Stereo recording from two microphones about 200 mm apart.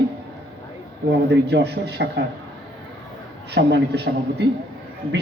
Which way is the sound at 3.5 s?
55° right (ahead or behind).